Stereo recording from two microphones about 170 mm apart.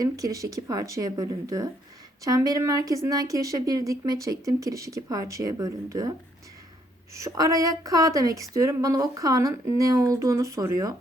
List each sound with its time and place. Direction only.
0.0 s speech: 20° right (ahead or behind)